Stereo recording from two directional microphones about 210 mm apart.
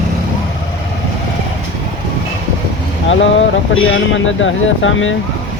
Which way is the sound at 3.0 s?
65° left (ahead or behind).